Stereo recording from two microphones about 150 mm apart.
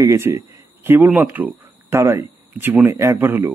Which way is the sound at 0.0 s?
20° right (ahead or behind).